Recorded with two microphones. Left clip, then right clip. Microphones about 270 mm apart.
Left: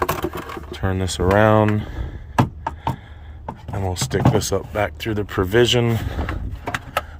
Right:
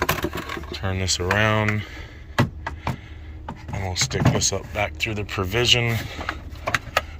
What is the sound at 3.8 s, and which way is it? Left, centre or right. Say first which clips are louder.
Speech: left 2 dB; left.